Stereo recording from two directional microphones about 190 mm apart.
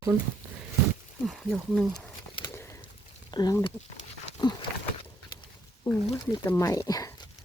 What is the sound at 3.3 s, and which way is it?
Speech, 20° left (ahead or behind).